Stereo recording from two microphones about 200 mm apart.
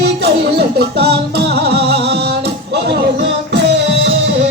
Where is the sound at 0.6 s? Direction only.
55° right (ahead or behind).